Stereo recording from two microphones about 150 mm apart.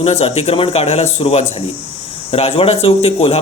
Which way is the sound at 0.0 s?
40° left (ahead or behind).